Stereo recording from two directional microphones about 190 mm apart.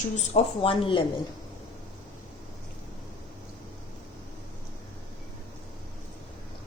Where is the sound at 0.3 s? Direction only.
30° left (ahead or behind).